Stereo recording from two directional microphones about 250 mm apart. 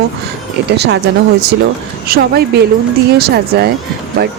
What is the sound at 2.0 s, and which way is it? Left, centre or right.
Speech, right.